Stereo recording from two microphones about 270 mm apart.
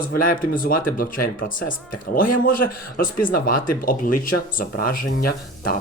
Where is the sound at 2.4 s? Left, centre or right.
Left.